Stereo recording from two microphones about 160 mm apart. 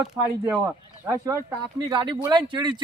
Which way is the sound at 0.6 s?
20° right (ahead or behind).